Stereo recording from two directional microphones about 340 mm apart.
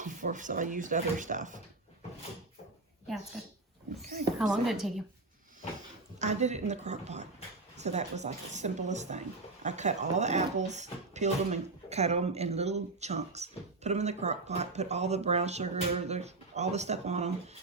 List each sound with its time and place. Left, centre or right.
0.0 s speech: right
4.4 s a woman's voice: centre
6.1 s speech: centre